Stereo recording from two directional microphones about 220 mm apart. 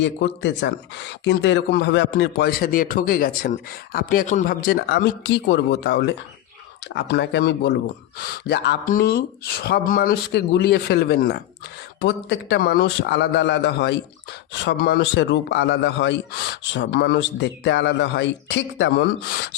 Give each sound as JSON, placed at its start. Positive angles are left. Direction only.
{"t": 0.0, "sound": "speech", "side_deg": 55}